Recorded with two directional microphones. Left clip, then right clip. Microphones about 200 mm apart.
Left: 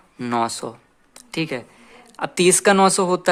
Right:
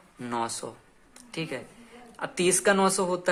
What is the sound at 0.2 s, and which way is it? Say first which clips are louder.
Speech: left 9 dB; 40° left (ahead or behind).